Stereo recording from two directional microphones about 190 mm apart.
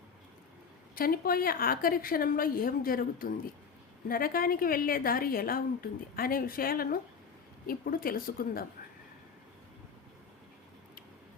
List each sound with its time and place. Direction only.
0.9 s a woman's voice: 50° left (ahead or behind)